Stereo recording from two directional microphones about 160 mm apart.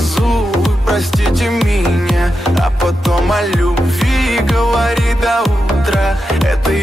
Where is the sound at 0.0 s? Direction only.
Centre (ahead or behind).